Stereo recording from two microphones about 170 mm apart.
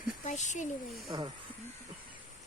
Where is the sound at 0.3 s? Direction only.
45° left (ahead or behind).